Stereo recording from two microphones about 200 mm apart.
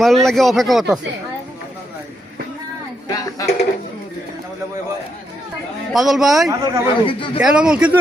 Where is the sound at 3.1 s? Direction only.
15° left (ahead or behind).